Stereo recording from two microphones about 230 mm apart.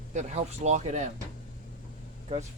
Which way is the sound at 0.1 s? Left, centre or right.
Right.